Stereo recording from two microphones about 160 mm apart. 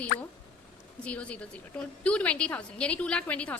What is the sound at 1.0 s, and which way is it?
A woman's voice, 10° left (ahead or behind).